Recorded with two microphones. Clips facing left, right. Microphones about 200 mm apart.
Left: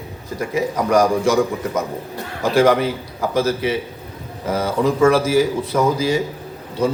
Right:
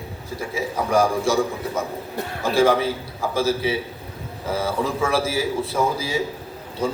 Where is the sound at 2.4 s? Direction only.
70° left (ahead or behind).